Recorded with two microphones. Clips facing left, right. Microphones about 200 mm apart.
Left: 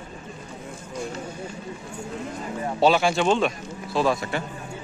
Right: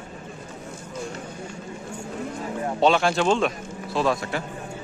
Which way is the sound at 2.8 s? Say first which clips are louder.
Left 1 dB; 5° left (ahead or behind).